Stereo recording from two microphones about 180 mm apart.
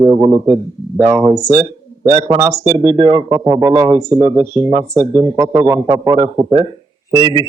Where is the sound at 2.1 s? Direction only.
35° right (ahead or behind).